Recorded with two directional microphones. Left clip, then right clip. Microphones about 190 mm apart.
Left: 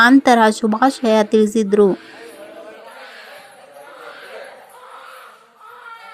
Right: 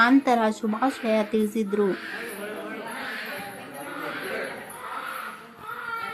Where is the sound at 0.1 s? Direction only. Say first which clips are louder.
Left 9 dB; 40° left (ahead or behind).